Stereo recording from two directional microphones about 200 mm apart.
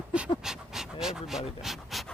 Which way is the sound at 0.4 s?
Centre (ahead or behind).